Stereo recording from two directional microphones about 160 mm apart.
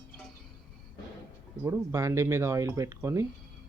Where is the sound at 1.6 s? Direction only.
20° right (ahead or behind).